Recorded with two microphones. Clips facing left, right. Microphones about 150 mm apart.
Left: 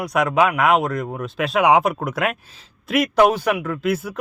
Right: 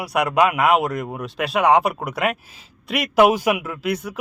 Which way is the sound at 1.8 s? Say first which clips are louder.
Left 1 dB; centre (ahead or behind).